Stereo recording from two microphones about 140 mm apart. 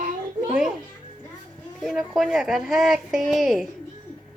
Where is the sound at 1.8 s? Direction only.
Centre (ahead or behind).